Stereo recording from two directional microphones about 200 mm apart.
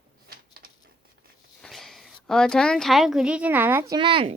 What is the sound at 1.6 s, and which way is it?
A woman's voice, centre (ahead or behind).